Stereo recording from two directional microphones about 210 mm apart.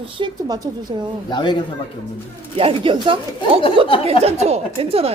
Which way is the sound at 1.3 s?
20° left (ahead or behind).